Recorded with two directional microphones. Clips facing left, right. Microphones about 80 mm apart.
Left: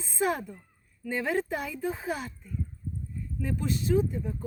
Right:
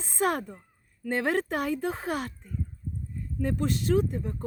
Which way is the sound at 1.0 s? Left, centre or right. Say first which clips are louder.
Right 2 dB; right.